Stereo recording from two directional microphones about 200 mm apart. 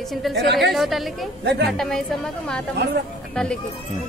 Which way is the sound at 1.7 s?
Centre (ahead or behind).